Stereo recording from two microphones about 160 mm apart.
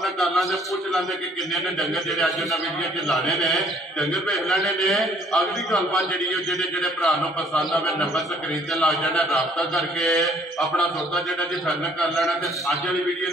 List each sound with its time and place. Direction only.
0.0 s a man's voice: centre (ahead or behind)